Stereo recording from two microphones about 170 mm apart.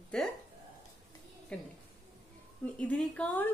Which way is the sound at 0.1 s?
5° left (ahead or behind).